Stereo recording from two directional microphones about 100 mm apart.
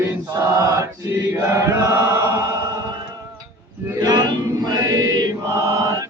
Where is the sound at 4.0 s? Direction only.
45° right (ahead or behind).